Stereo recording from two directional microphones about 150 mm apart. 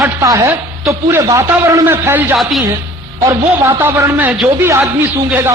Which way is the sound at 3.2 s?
20° right (ahead or behind).